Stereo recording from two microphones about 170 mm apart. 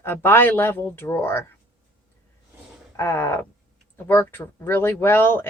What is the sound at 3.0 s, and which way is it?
A woman's voice, 15° left (ahead or behind).